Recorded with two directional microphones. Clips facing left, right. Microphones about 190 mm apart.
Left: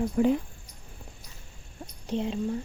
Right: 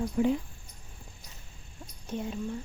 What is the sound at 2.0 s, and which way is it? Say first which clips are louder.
Speech: left 5 dB; 25° left (ahead or behind).